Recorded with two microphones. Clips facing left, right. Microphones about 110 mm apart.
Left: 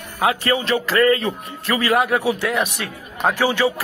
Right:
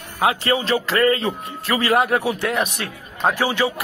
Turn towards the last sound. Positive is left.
turn(degrees=-25)  # may be behind; listen again after turning